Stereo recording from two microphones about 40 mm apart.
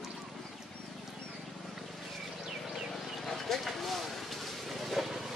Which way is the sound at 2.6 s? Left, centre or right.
Centre.